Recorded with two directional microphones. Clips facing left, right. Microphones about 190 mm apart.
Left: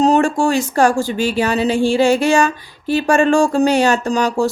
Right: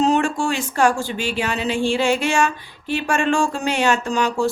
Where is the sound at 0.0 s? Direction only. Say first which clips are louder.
Left 5 dB; 40° left (ahead or behind).